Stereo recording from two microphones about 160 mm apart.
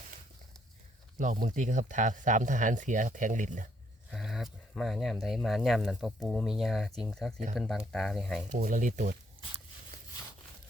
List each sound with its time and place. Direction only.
1.2 s speech: 55° right (ahead or behind)
4.1 s speech: centre (ahead or behind)
8.4 s speech: 55° right (ahead or behind)